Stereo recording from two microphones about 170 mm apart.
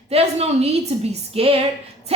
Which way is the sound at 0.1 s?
35° right (ahead or behind).